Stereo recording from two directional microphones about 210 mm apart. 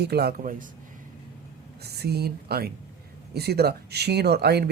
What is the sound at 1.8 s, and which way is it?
Speech, 50° right (ahead or behind).